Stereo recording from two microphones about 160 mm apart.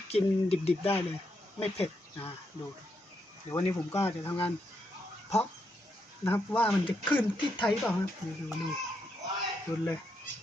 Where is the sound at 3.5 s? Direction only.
15° left (ahead or behind).